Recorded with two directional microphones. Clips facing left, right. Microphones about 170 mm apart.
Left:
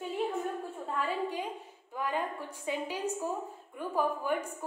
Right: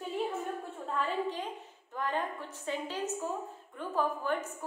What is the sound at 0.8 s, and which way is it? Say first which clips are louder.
A woman's voice: right 1 dB; 10° left (ahead or behind).